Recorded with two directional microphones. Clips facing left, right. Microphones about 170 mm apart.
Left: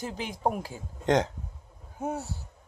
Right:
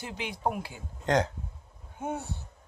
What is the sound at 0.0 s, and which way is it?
Speech, 40° left (ahead or behind).